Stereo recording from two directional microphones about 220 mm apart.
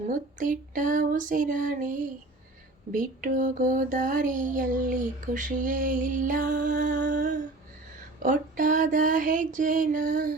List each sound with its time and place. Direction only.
0.1 s music: 35° right (ahead or behind)